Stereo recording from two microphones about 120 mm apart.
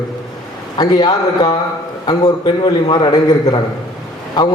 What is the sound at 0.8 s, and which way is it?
A man's voice, 35° left (ahead or behind).